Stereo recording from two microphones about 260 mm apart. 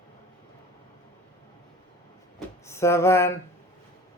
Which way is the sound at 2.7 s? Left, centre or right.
Centre.